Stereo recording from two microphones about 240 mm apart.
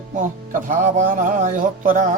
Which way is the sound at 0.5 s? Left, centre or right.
Right.